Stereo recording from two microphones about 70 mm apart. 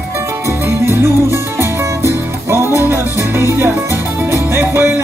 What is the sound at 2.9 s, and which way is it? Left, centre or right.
Music, right.